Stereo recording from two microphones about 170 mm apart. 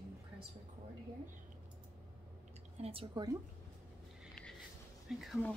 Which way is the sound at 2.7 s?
35° right (ahead or behind).